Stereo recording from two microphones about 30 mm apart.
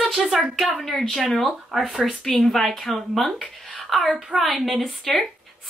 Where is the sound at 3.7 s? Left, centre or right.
Centre.